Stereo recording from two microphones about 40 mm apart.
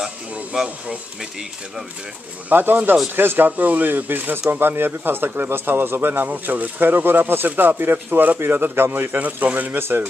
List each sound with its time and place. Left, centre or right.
0.5 s speech: right
2.5 s speech: right
6.2 s speech: right
9.4 s speech: right
9.8 s speech: right